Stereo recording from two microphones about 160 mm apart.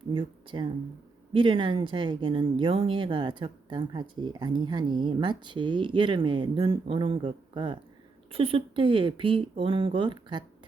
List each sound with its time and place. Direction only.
0.1 s speech: 30° right (ahead or behind)